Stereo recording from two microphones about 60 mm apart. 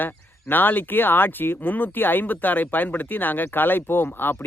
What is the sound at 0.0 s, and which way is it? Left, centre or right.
Speech, left.